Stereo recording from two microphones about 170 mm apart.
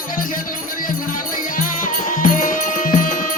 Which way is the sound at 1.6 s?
50° left (ahead or behind).